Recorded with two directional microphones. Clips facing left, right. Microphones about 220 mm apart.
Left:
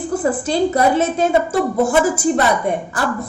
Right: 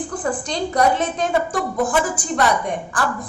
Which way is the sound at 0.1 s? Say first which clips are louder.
Left 9 dB; 25° left (ahead or behind).